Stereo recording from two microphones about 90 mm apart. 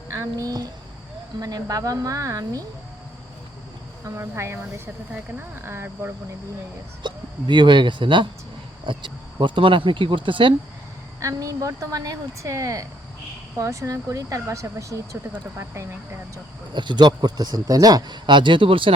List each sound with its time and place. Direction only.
0.1 s a woman's voice: 35° right (ahead or behind)
4.0 s speech: 30° right (ahead or behind)
7.0 s speech: 60° right (ahead or behind)
11.2 s a woman's voice: 35° right (ahead or behind)
16.7 s speech: 60° right (ahead or behind); by 18.9 s 75° right (ahead or behind)